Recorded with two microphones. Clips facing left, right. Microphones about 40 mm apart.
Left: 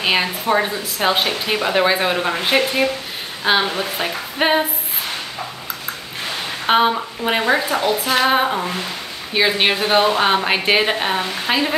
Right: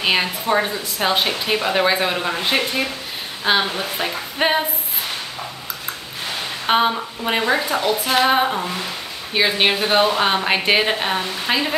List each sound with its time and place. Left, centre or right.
0.0 s a woman's voice: centre
3.4 s a woman's voice: left
4.0 s a woman's voice: centre
6.7 s speech: centre
7.8 s a woman's voice: centre